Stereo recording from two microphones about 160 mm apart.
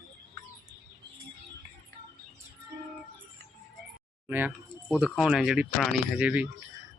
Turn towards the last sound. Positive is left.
turn(degrees=-10)  # may be behind; listen again after turning